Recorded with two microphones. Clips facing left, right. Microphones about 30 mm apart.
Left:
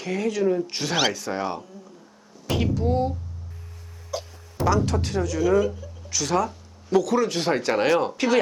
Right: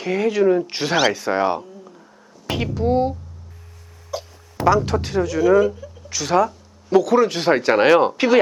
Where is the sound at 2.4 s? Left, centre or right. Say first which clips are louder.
Right 3 dB; centre.